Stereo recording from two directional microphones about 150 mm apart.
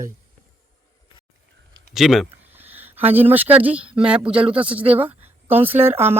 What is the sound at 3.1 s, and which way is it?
A woman's voice, 10° right (ahead or behind).